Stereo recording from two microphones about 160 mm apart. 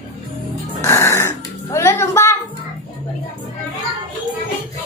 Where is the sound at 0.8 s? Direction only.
15° left (ahead or behind).